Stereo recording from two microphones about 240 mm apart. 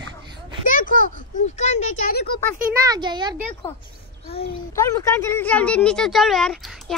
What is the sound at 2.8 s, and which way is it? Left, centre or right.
Speech, centre.